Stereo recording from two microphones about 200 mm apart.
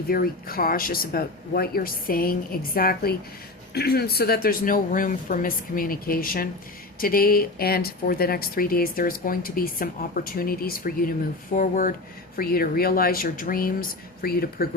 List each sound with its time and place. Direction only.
0.1 s speech: 45° left (ahead or behind)